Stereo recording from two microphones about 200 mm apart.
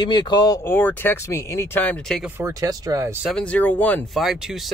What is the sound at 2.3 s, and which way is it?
Speech, 15° right (ahead or behind).